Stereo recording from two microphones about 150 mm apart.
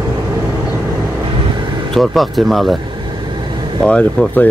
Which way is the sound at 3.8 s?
5° left (ahead or behind).